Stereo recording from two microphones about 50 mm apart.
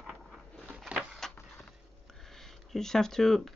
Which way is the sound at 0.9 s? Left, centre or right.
Right.